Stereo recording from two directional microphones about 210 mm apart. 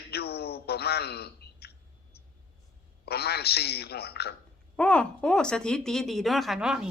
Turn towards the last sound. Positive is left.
turn(degrees=-5)  # may be behind; listen again after turning